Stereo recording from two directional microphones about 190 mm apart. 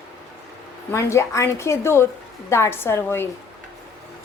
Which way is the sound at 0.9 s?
15° left (ahead or behind).